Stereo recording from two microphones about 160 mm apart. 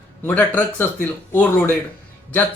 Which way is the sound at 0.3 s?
10° left (ahead or behind).